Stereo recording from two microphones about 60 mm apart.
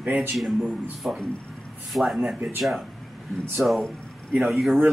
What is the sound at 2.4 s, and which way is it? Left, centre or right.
Speech, right.